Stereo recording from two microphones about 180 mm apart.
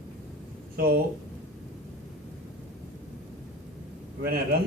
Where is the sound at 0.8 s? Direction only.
60° right (ahead or behind).